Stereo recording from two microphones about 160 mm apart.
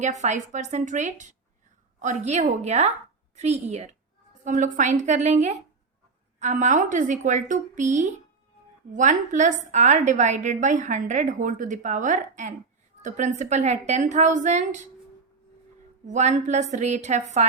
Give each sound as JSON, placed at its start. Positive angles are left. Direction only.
{"t": 0.0, "sound": "a woman's voice", "side_deg": -45}
{"t": 16.0, "sound": "a woman's voice", "side_deg": -50}